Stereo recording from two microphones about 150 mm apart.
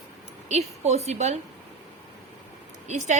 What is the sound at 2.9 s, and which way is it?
Speech, 50° right (ahead or behind).